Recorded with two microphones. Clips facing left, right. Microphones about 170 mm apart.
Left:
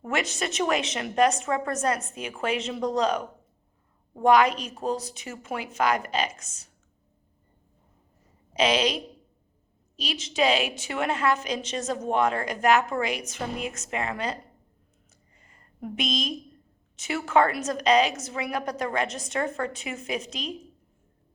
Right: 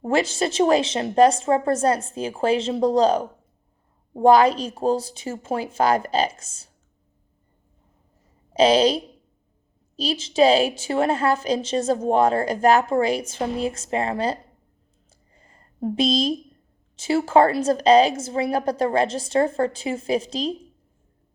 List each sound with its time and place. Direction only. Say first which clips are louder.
0.0 s a woman's voice: right 7 dB; 30° right (ahead or behind)
8.5 s a woman's voice: right 7 dB; 30° right (ahead or behind)
15.1 s a sound: right 6 dB; 30° right (ahead or behind)
16.9 s a woman's voice: right 6 dB; 30° right (ahead or behind)